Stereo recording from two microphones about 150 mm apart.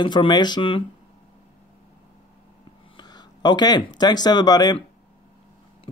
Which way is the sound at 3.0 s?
30° left (ahead or behind).